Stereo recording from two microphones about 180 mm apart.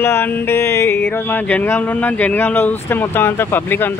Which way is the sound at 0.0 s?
10° left (ahead or behind).